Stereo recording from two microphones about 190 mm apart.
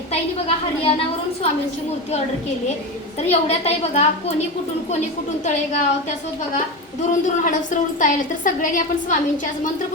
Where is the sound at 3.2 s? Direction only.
35° left (ahead or behind).